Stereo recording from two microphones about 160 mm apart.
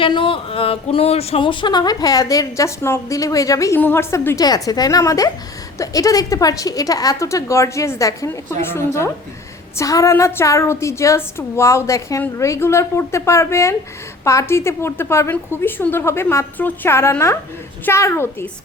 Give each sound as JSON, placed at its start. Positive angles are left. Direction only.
{"t": 0.0, "sound": "a woman's voice", "side_deg": 30}